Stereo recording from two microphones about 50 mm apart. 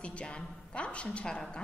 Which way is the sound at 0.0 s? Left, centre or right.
Left.